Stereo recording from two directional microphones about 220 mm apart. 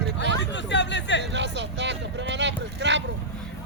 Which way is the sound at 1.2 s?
50° right (ahead or behind).